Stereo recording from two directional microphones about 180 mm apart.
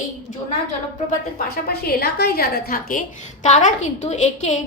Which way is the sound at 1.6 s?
60° left (ahead or behind).